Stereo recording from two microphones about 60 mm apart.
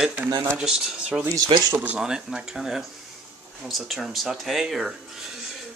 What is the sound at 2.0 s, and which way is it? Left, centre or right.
Speech, centre.